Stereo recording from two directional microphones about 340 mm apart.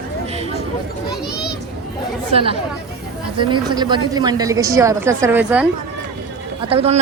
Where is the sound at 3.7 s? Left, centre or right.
Centre.